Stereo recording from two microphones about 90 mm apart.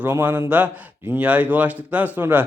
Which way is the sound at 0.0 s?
20° right (ahead or behind).